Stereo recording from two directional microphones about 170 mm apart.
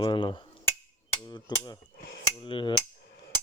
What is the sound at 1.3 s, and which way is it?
Mechanisms, 25° left (ahead or behind).